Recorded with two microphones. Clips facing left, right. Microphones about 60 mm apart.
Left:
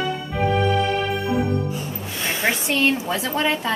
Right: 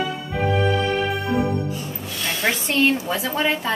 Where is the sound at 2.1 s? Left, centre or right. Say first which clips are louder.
Even; left.